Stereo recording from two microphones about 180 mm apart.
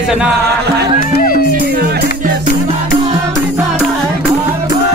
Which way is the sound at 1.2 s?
50° left (ahead or behind).